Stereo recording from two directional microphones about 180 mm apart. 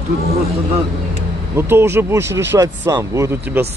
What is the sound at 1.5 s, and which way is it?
Speech, 15° right (ahead or behind).